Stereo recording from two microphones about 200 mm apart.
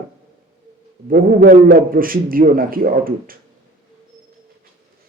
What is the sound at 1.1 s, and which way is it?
A man's voice, 45° right (ahead or behind).